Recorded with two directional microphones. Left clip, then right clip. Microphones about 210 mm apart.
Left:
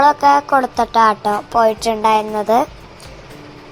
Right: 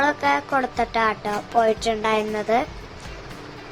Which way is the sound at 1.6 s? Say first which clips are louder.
Left 8 dB; 15° left (ahead or behind).